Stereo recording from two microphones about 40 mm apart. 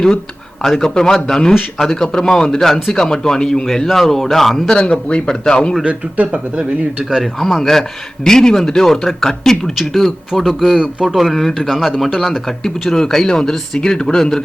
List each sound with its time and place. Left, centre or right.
0.8 s speech: centre
3.8 s speech: centre
4.7 s a man's voice: left
5.9 s speech: right
7.0 s speech: centre
7.3 s speech: centre